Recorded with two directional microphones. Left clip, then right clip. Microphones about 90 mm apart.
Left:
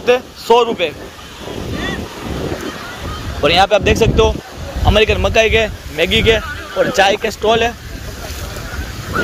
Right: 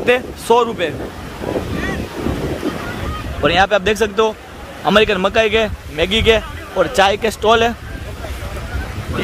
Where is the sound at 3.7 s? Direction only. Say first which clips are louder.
Left 3 dB; 20° right (ahead or behind).